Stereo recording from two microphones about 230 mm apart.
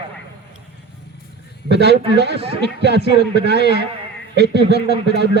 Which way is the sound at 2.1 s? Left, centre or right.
Right.